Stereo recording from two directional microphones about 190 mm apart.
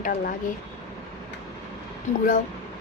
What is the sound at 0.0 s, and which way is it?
Speech, 45° left (ahead or behind).